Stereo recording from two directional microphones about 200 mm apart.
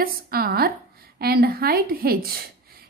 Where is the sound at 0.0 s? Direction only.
50° right (ahead or behind).